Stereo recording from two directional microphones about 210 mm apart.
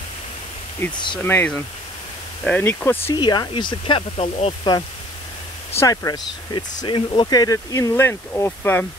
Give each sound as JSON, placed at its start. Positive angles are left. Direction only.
{"t": 0.9, "sound": "speech", "side_deg": 20}
{"t": 1.2, "sound": "speech", "side_deg": 10}
{"t": 3.2, "sound": "speech", "side_deg": 20}